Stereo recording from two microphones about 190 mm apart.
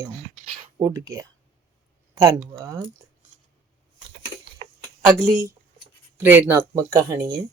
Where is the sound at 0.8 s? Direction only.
15° right (ahead or behind).